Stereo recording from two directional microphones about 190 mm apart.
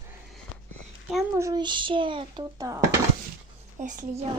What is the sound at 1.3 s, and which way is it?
A child's voice, 20° right (ahead or behind).